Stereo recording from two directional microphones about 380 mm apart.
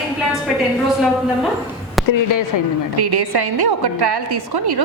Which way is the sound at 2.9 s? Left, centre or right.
Right.